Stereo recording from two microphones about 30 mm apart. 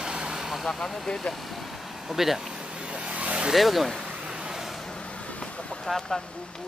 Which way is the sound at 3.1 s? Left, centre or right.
Right.